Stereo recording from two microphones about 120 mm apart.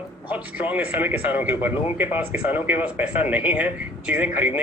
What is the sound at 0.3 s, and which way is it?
Speech, 15° right (ahead or behind).